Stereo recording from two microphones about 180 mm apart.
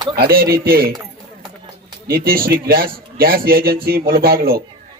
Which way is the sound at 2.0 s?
55° right (ahead or behind).